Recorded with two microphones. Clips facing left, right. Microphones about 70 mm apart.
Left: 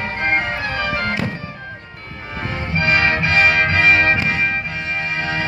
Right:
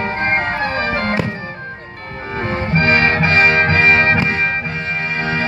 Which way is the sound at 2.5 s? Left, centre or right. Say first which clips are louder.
Right 4 dB; right.